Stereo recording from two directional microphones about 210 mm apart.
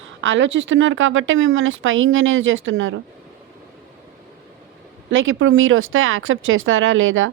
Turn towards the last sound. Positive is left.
turn(degrees=-70)  # may be behind; listen again after turning